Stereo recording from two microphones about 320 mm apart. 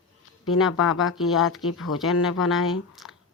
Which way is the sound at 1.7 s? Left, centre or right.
Left.